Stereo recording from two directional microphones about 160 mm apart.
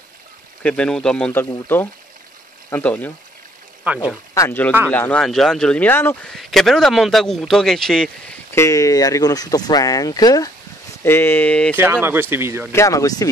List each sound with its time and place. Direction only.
0.6 s speech: 5° left (ahead or behind)
3.8 s speech: 10° right (ahead or behind)
4.3 s speech: 15° left (ahead or behind)
6.3 s a man's voice: centre (ahead or behind)
8.5 s speech: 20° left (ahead or behind)
11.7 s speech: 15° right (ahead or behind)
12.7 s speech: 20° left (ahead or behind)